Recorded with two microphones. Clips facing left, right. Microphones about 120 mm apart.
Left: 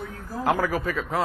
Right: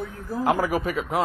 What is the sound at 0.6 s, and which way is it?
Speech, 15° right (ahead or behind).